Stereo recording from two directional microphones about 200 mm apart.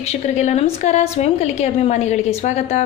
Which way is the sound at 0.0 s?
35° left (ahead or behind).